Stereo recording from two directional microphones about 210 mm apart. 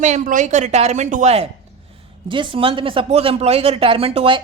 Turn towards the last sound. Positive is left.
turn(degrees=-25)  # may be behind; listen again after turning